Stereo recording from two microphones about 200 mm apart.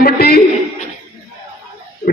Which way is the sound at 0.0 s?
50° left (ahead or behind).